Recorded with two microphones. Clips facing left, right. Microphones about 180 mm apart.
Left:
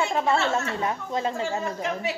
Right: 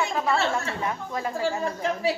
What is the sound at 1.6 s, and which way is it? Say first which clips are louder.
Speech: right 2 dB; 35° right (ahead or behind).